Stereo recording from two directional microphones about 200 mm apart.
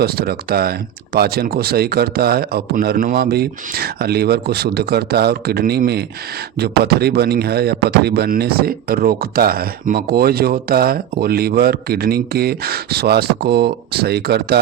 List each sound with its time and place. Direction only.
0.0 s speech: 50° right (ahead or behind)